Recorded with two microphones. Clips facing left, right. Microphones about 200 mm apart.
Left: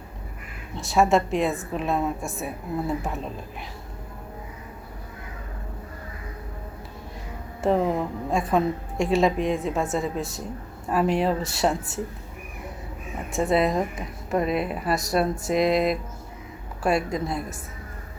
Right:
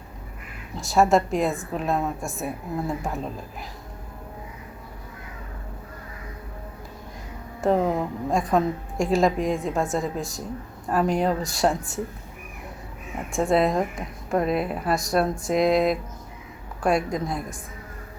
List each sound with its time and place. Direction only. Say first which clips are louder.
0.8 s a woman's voice: right 1 dB; centre (ahead or behind)
7.7 s a woman's voice: even; centre (ahead or behind)
13.3 s a woman's voice: right 1 dB; centre (ahead or behind)